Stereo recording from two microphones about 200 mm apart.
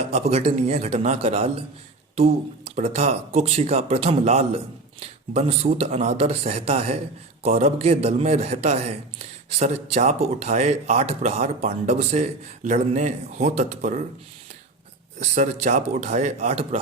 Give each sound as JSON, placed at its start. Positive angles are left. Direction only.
{"t": 0.0, "sound": "a man's voice", "side_deg": -30}
{"t": 15.2, "sound": "a man's voice", "side_deg": -40}